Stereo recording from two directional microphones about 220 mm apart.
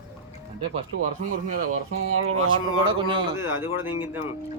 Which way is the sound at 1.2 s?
35° right (ahead or behind).